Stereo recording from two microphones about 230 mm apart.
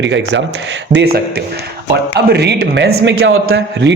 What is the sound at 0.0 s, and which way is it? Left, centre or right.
Speech, right.